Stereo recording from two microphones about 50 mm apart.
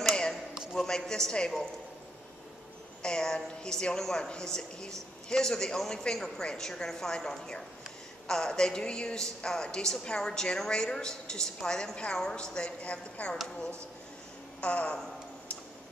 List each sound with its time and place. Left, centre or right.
0.7 s a man's voice: centre
3.0 s a woman's voice: centre
14.6 s speech: left